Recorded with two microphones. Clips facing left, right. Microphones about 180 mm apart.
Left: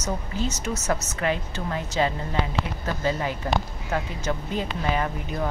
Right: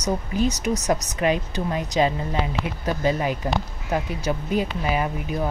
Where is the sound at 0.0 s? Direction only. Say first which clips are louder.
Right 5 dB; 15° right (ahead or behind).